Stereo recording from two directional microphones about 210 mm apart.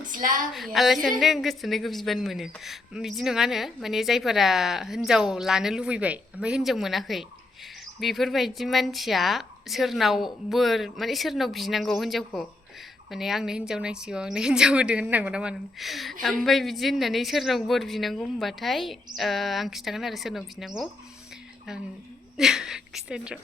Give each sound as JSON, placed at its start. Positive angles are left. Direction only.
{"t": 0.1, "sound": "speech", "side_deg": -40}
{"t": 0.5, "sound": "a woman's voice", "side_deg": 0}
{"t": 22.4, "sound": "a woman's voice", "side_deg": 0}